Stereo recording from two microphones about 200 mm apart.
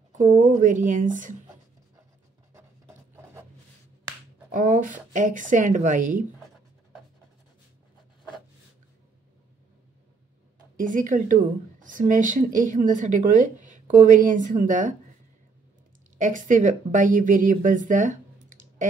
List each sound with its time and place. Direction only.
0.1 s speech: 40° right (ahead or behind)
2.5 s filing: 10° right (ahead or behind)
4.5 s speech: 40° right (ahead or behind)
10.8 s speech: 40° right (ahead or behind)
16.2 s speech: 40° right (ahead or behind)